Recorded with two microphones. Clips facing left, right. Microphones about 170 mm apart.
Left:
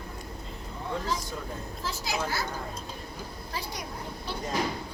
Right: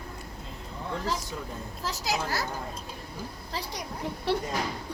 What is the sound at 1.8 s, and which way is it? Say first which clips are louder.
Speech: right 1 dB; 40° right (ahead or behind).